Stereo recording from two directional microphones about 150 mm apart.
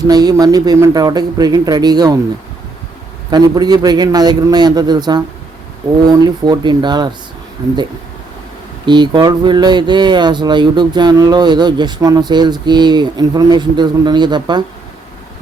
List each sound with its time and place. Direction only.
0.1 s speech: 25° right (ahead or behind)
3.2 s speech: 25° right (ahead or behind)
8.9 s speech: 30° right (ahead or behind)